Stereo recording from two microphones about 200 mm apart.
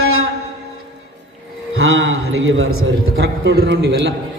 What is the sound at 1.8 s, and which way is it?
A man's voice, 90° right.